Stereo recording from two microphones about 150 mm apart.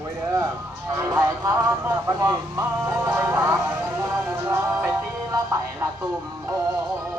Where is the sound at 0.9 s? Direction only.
20° right (ahead or behind).